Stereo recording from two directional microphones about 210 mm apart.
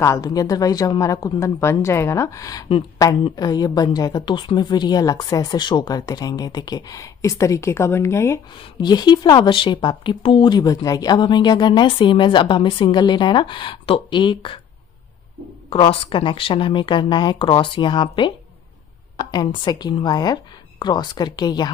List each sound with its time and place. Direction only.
0.0 s a woman's voice: 15° left (ahead or behind)
15.7 s a woman's voice: 25° left (ahead or behind)